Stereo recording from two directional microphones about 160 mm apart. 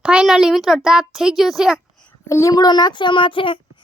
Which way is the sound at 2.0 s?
15° left (ahead or behind).